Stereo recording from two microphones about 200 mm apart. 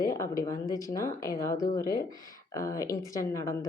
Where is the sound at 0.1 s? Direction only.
15° left (ahead or behind).